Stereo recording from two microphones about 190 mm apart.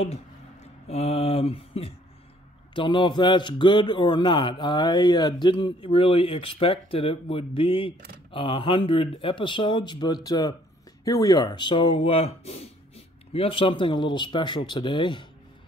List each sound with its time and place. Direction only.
0.8 s mantra: 35° left (ahead or behind)
2.7 s a man's voice: 25° left (ahead or behind)